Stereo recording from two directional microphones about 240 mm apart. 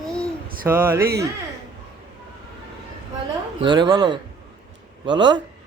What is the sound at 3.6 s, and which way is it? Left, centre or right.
Speech, centre.